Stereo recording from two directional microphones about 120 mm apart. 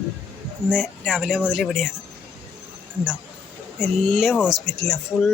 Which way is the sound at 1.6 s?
5° left (ahead or behind).